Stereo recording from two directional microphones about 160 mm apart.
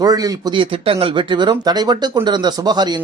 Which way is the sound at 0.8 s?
35° right (ahead or behind).